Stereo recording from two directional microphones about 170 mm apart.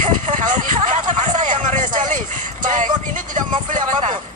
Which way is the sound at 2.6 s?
45° right (ahead or behind).